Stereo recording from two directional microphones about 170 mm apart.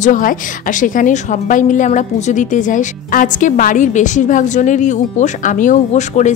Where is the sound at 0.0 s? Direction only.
50° left (ahead or behind).